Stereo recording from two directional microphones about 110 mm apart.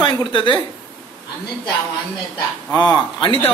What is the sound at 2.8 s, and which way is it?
Speech, 50° left (ahead or behind).